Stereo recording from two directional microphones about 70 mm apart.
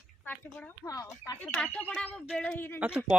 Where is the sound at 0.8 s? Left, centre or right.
Left.